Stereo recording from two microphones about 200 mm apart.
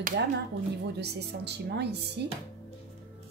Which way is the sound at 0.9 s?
55° right (ahead or behind).